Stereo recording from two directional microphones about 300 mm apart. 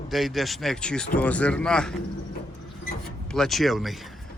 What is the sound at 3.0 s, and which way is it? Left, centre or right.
Speech, centre.